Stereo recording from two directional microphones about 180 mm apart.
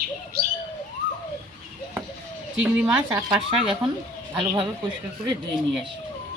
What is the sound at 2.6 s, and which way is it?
Speech, 5° right (ahead or behind).